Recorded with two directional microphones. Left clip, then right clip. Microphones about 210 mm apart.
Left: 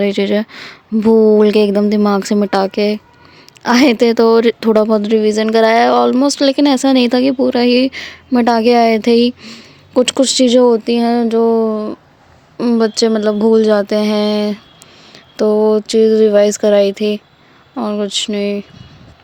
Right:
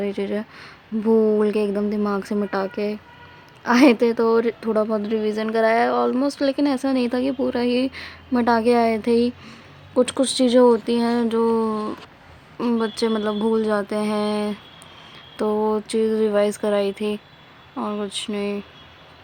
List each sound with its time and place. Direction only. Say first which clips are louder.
0.0 s a woman's voice: left 11 dB; 40° left (ahead or behind)